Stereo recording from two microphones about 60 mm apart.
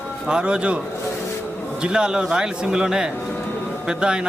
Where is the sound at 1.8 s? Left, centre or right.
Centre.